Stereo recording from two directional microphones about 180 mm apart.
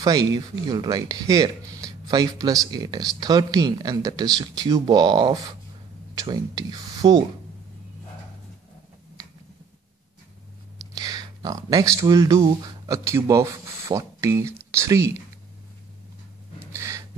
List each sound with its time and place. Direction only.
0.0 s speech: 20° right (ahead or behind)
11.0 s speech: 20° right (ahead or behind)
16.7 s gasp: 15° right (ahead or behind)